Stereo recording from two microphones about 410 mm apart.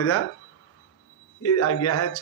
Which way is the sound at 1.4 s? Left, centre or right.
Left.